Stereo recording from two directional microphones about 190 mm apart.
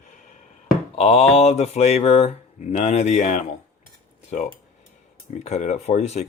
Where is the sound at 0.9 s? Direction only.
35° left (ahead or behind).